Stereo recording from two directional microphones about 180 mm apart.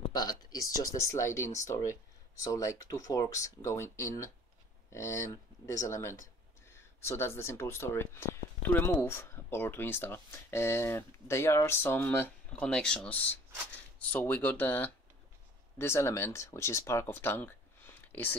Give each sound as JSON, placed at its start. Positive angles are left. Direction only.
{"t": 0.1, "sound": "speech", "side_deg": 20}